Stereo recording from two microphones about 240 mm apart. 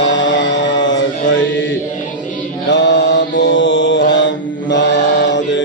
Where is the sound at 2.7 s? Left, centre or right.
Left.